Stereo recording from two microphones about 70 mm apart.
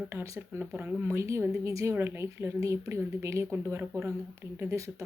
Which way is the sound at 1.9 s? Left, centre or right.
Right.